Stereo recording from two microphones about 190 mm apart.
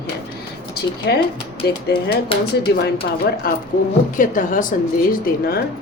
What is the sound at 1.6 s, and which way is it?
Speech, 55° left (ahead or behind).